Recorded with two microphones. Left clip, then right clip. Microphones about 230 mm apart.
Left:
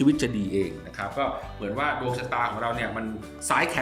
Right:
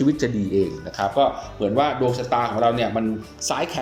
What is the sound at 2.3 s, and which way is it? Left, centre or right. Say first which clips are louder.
A man's voice: right 7 dB; centre.